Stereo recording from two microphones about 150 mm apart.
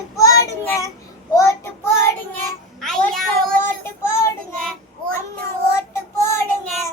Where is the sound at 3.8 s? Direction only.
15° left (ahead or behind).